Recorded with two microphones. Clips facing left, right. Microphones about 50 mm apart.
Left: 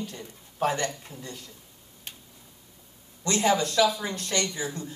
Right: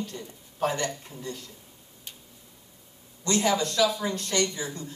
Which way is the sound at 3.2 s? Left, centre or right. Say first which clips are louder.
Left 1 dB; left.